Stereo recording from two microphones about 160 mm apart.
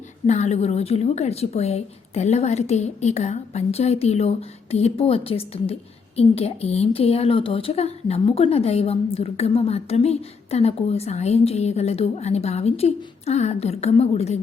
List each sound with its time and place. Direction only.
0.3 s a woman's voice: 45° left (ahead or behind)